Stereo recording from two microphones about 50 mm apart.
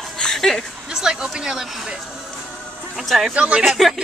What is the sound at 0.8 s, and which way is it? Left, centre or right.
Speech, centre.